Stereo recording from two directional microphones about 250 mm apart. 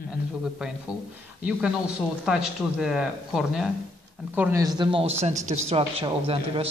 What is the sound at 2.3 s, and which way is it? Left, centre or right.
A man's voice, centre.